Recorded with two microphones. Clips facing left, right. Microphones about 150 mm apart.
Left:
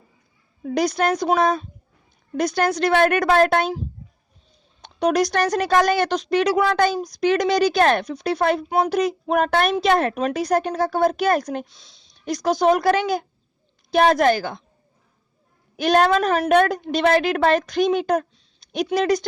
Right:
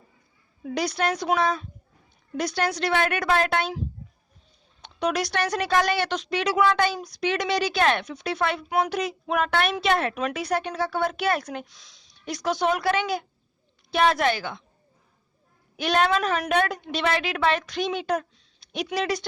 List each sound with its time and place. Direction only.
0.6 s speech: 45° left (ahead or behind)
11.7 s speech: 25° left (ahead or behind)
12.2 s speech: 40° left (ahead or behind)
15.7 s speech: 45° left (ahead or behind)